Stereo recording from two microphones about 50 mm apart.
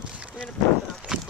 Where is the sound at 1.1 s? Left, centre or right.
Centre.